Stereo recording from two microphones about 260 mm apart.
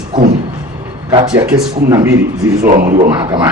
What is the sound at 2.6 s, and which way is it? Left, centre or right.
Speech, right.